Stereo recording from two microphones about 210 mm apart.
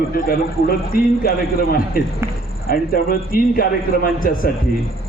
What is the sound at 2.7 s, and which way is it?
A man's voice, 45° left (ahead or behind).